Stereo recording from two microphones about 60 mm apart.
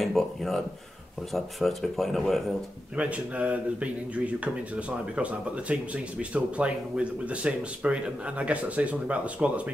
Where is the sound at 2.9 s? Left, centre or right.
Right.